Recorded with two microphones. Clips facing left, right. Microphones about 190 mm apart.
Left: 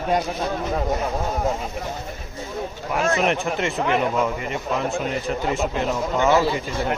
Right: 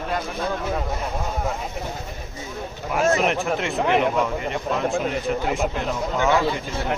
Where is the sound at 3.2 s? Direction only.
Centre (ahead or behind).